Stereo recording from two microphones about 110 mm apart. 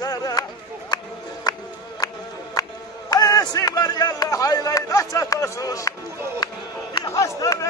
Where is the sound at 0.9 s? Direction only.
40° left (ahead or behind).